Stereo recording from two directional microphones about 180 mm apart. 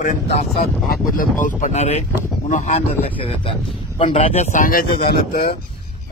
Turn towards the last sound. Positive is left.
turn(degrees=55)  # may be behind; listen again after turning